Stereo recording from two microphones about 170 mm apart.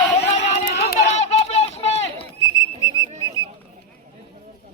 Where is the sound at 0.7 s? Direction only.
75° left (ahead or behind).